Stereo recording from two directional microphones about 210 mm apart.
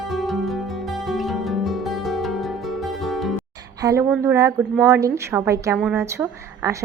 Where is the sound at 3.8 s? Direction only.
15° right (ahead or behind).